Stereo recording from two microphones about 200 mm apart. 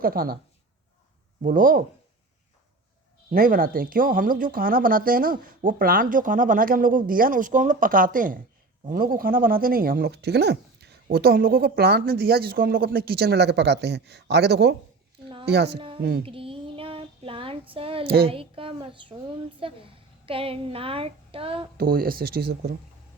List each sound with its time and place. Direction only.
0.0 s speech: 45° right (ahead or behind)
1.4 s speech: 40° right (ahead or behind)
3.2 s speech: 45° right (ahead or behind)
16.0 s a sound: 55° right (ahead or behind)
16.2 s child singing: 25° right (ahead or behind)
21.8 s speech: 45° right (ahead or behind)